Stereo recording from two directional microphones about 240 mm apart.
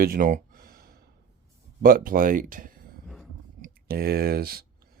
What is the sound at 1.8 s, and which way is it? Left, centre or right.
Speech, right.